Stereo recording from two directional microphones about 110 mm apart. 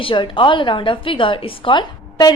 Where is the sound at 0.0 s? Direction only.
50° left (ahead or behind).